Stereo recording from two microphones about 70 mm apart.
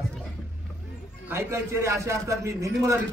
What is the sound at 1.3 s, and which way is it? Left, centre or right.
A man's voice, right.